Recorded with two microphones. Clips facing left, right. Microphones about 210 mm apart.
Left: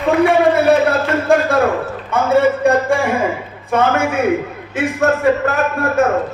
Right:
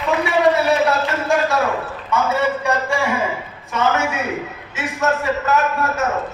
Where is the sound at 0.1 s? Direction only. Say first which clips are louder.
Left 4 dB; 55° left (ahead or behind).